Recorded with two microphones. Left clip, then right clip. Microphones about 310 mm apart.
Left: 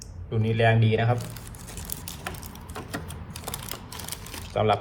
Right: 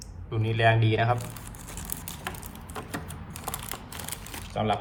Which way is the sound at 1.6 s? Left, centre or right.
Centre.